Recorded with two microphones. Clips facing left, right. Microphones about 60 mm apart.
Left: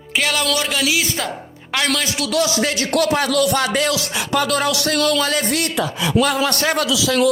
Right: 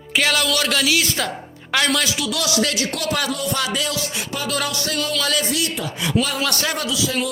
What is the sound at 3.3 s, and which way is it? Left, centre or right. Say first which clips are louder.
Music: left 8 dB; left.